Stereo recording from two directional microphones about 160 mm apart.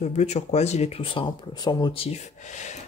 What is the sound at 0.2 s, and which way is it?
Speech, 45° left (ahead or behind).